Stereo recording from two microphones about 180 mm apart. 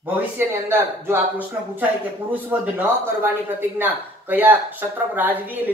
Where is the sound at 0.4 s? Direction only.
15° right (ahead or behind).